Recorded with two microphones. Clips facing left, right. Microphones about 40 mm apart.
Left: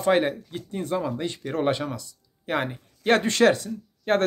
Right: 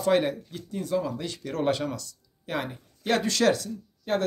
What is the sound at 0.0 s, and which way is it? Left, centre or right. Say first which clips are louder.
Speech: left 2 dB; left.